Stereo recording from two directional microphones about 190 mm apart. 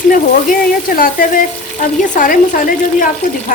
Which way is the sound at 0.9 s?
50° left (ahead or behind).